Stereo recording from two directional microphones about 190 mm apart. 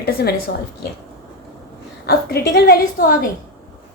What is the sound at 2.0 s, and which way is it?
A woman's voice, 55° left (ahead or behind).